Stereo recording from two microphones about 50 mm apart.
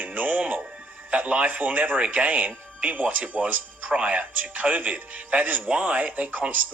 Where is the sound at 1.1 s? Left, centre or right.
Right.